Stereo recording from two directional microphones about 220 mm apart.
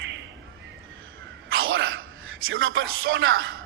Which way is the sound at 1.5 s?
65° right (ahead or behind).